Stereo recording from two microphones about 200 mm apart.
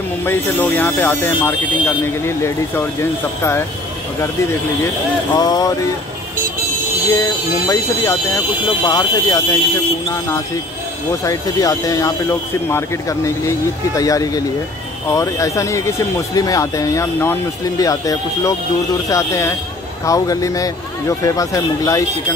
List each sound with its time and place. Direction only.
0.2 s speech: 10° left (ahead or behind)
5.3 s a sound: 20° left (ahead or behind)
7.1 s speech: 15° left (ahead or behind)
11.2 s speech: 15° left (ahead or behind)